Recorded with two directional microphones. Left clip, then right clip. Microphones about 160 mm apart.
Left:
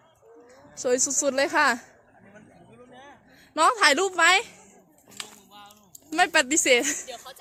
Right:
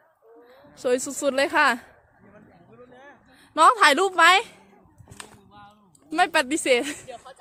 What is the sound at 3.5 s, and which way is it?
Speech, 10° right (ahead or behind).